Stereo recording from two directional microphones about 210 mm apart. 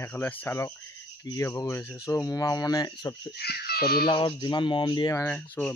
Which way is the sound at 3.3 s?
50° left (ahead or behind).